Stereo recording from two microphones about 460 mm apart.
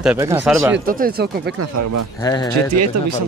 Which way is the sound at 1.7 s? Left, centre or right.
Right.